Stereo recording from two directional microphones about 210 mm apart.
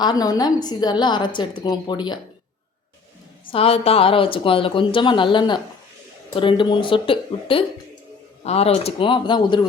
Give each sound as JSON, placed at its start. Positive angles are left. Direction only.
{"t": 0.0, "sound": "a woman's voice", "side_deg": 20}
{"t": 3.5, "sound": "a woman's voice", "side_deg": 30}